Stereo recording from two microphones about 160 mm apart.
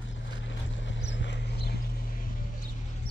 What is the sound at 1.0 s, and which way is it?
Clip-clop, 90° left.